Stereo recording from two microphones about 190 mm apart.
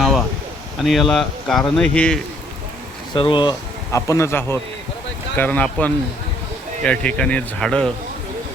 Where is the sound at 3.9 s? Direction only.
15° left (ahead or behind).